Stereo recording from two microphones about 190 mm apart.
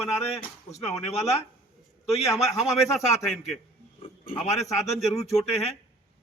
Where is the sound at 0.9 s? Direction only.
35° left (ahead or behind).